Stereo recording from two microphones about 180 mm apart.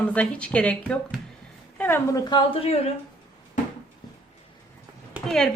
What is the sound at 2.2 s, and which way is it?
Speech, 25° left (ahead or behind).